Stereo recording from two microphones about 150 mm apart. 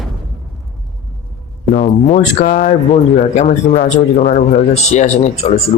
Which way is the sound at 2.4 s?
70° left (ahead or behind).